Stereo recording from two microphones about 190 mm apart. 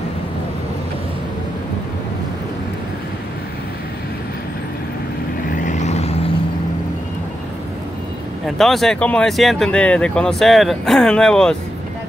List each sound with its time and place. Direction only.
5.5 s vehicle: 40° left (ahead or behind)
8.5 s speech: centre (ahead or behind)